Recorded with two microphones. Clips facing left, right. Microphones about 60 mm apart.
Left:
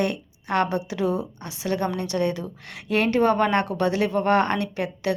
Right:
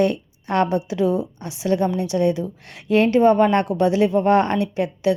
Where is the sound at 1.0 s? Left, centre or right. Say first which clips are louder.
Right 4 dB; left.